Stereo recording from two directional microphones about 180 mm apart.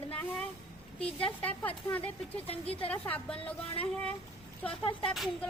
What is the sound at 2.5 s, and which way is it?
Speech, 30° left (ahead or behind).